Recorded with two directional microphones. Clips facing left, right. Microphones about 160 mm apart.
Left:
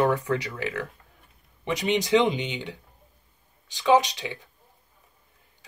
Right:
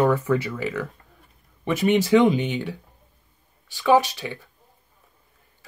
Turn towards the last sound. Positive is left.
turn(degrees=20)  # may be behind; listen again after turning